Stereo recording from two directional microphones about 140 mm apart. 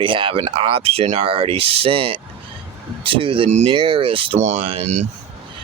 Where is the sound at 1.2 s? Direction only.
40° right (ahead or behind).